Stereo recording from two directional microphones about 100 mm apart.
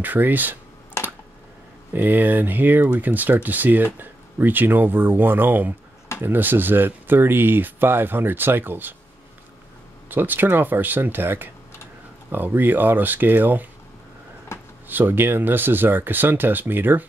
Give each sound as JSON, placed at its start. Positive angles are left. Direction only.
{"t": 0.0, "sound": "speech", "side_deg": -20}
{"t": 2.0, "sound": "speech", "side_deg": -20}
{"t": 10.0, "sound": "speech", "side_deg": -20}
{"t": 14.9, "sound": "speech", "side_deg": -20}